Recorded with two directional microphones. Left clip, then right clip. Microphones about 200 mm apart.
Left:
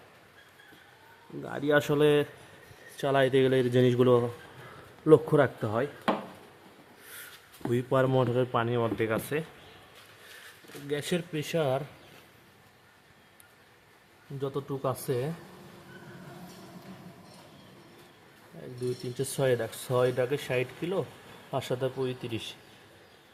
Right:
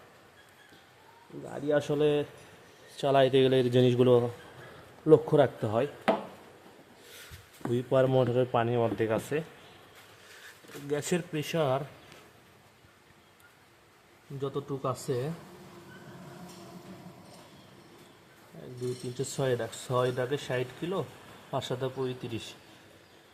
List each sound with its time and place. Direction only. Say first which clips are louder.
1.5 s speech: left 3 dB; 20° left (ahead or behind)
3.0 s speech: right 1 dB; centre (ahead or behind)
7.6 s speech: right 1 dB; 5° left (ahead or behind)
10.8 s speech: even; 5° right (ahead or behind)
14.4 s speech: left 1 dB; 10° left (ahead or behind)
19.1 s speech: left 3 dB; 10° left (ahead or behind)